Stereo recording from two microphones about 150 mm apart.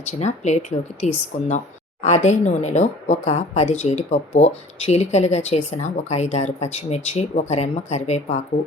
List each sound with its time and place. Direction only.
0.0 s speech: 50° left (ahead or behind)